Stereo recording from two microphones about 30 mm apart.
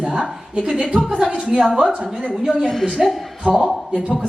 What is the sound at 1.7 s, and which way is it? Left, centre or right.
Speech, right.